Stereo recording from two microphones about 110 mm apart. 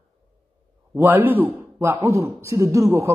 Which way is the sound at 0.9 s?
15° right (ahead or behind).